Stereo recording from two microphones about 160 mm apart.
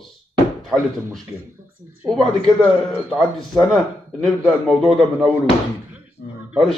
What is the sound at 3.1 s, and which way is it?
A man's voice, centre (ahead or behind).